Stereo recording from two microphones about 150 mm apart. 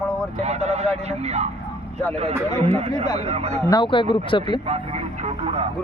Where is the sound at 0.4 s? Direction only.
45° right (ahead or behind).